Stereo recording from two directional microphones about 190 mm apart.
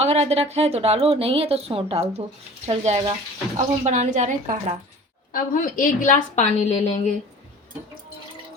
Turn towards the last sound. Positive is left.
turn(degrees=35)  # may be behind; listen again after turning